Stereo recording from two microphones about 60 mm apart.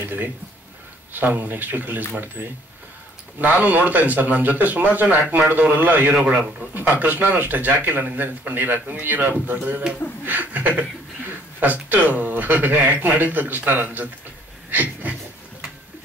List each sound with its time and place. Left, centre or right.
1.1 s speech: right
6.1 s a man's voice: centre
6.7 s speech: right